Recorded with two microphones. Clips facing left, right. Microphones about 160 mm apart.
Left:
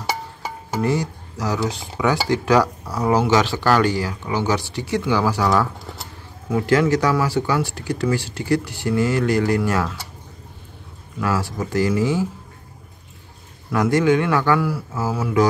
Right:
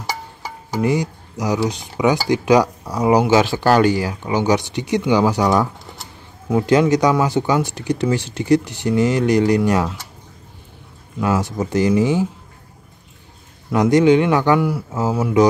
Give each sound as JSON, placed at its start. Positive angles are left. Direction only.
{"t": 0.7, "sound": "speech", "side_deg": -15}
{"t": 11.1, "sound": "speech", "side_deg": -20}
{"t": 13.7, "sound": "speech", "side_deg": -20}